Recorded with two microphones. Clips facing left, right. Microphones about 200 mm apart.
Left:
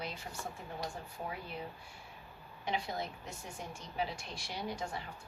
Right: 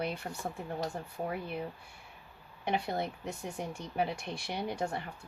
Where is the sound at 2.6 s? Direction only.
60° right (ahead or behind).